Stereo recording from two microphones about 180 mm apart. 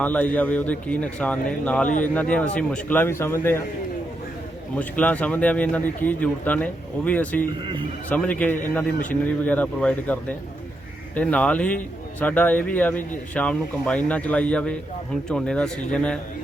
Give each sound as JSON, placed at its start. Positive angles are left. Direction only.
{"t": 0.0, "sound": "speech", "side_deg": 10}
{"t": 4.7, "sound": "speech", "side_deg": 10}
{"t": 7.6, "sound": "speech", "side_deg": -25}
{"t": 8.1, "sound": "speech", "side_deg": 10}